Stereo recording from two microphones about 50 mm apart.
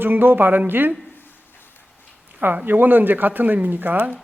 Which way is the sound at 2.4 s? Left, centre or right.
Right.